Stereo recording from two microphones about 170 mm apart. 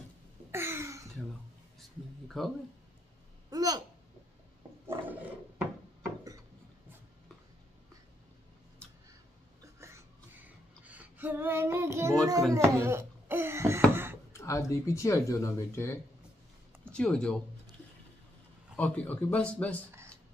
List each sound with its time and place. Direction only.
0.5 s a sound: 15° right (ahead or behind)
2.2 s speech: centre (ahead or behind)
3.4 s speech: 20° right (ahead or behind)
9.8 s a sound: 15° right (ahead or behind)
14.3 s speech: 20° left (ahead or behind)
16.9 s speech: 5° left (ahead or behind)
18.8 s speech: 10° left (ahead or behind)